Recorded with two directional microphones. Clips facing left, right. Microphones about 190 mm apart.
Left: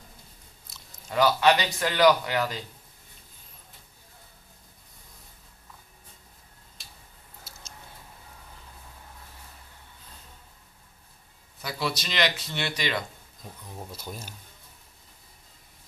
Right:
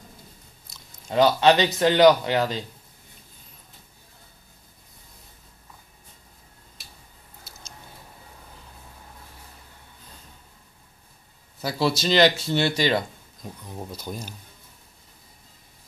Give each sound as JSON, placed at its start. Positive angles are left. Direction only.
{"t": 1.1, "sound": "speech", "side_deg": -25}
{"t": 11.6, "sound": "speech", "side_deg": -30}
{"t": 13.9, "sound": "speech", "side_deg": 5}